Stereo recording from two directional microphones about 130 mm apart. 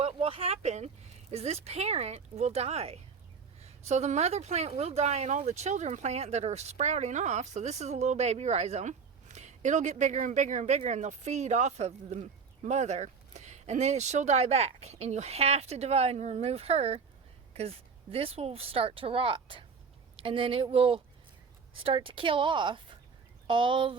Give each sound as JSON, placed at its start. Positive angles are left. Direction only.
{"t": 0.0, "sound": "speech", "side_deg": -45}